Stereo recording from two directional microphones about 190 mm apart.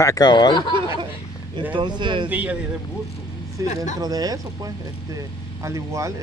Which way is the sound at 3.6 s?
20° right (ahead or behind).